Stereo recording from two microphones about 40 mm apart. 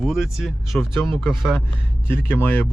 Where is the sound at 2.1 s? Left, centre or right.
Left.